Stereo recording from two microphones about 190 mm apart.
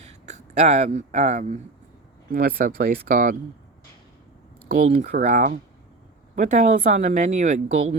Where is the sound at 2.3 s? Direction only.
50° right (ahead or behind).